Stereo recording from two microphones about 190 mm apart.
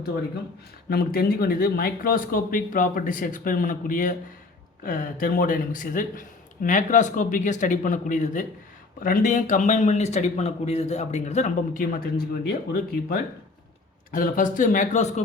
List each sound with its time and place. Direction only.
0.9 s a man's voice: 55° left (ahead or behind); by 15.2 s 40° left (ahead or behind)